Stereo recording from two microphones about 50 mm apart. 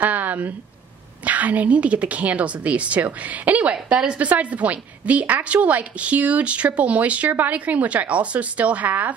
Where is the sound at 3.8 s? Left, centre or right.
Right.